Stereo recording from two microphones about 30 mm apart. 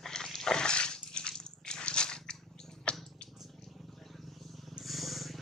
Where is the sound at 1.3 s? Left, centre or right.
Left.